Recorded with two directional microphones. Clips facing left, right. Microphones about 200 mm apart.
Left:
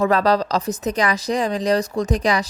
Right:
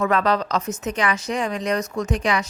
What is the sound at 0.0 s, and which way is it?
Speech, 35° left (ahead or behind).